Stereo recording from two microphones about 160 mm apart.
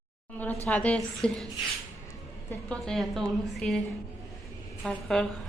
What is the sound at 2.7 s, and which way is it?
A woman's voice, 5° left (ahead or behind).